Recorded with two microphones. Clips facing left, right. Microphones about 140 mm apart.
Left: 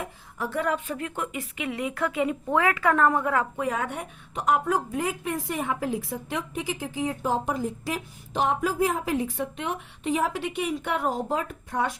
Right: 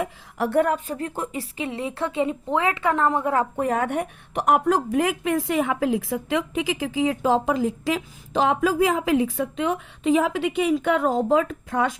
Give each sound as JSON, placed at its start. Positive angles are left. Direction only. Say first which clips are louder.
{"t": 0.0, "sound": "speech", "louder": "right 7 dB", "side_deg": -70}
{"t": 0.6, "sound": "speech", "louder": "right 4 dB", "side_deg": -40}
{"t": 3.6, "sound": "a woman's voice", "louder": "right 6 dB", "side_deg": -55}